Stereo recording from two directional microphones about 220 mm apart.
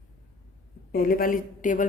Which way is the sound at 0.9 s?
40° left (ahead or behind).